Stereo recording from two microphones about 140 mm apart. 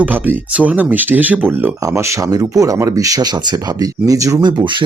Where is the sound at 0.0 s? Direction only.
10° right (ahead or behind).